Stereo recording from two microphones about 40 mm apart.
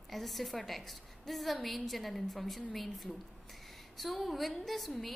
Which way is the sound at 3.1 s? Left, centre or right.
Centre.